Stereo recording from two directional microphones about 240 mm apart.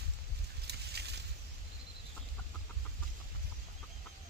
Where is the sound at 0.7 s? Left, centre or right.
Right.